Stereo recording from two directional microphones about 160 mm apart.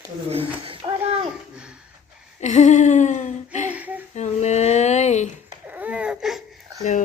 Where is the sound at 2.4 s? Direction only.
45° left (ahead or behind).